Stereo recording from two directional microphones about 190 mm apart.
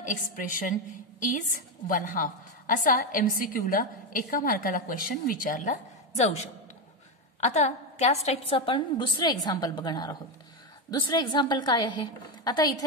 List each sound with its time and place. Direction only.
0.0 s a woman's voice: 45° left (ahead or behind)
1.9 s a woman's voice: 45° left (ahead or behind); by 12.8 s 20° left (ahead or behind)